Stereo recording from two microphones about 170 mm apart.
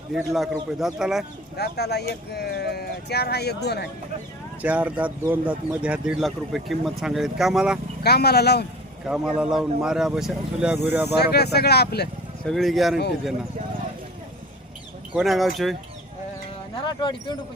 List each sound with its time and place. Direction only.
0.1 s speech: centre (ahead or behind)
1.5 s speech: 70° left (ahead or behind)
4.6 s speech: 10° right (ahead or behind)
8.0 s speech: 70° left (ahead or behind)
9.0 s speech: 5° right (ahead or behind)
11.2 s speech: 75° left (ahead or behind)
12.5 s speech: centre (ahead or behind)
15.1 s speech: centre (ahead or behind)
16.8 s speech: 30° left (ahead or behind)